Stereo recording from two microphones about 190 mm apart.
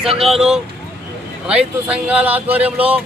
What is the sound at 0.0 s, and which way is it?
Speech, centre (ahead or behind).